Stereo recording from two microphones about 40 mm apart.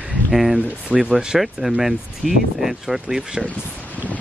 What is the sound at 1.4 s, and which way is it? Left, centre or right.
Speech, centre.